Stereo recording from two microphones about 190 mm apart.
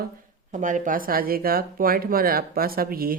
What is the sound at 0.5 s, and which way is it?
Speech, 40° right (ahead or behind).